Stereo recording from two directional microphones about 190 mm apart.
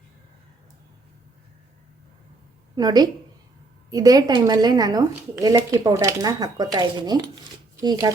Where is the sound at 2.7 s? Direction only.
20° right (ahead or behind).